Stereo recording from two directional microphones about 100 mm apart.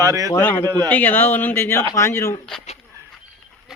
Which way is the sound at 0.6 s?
40° right (ahead or behind).